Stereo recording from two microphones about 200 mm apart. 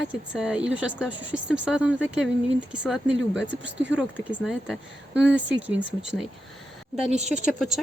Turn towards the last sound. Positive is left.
turn(degrees=0)  # may be behind; listen again after turning